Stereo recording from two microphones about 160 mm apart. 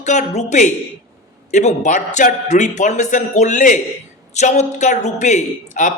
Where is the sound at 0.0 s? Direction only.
45° left (ahead or behind).